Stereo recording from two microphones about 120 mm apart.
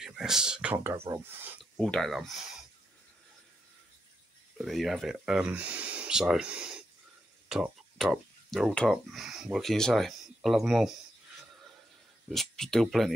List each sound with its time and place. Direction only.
0.0 s speech: 5° right (ahead or behind)
0.7 s speech: 20° right (ahead or behind)
1.8 s speech: 5° left (ahead or behind)
4.6 s speech: centre (ahead or behind)
12.3 s speech: 5° left (ahead or behind)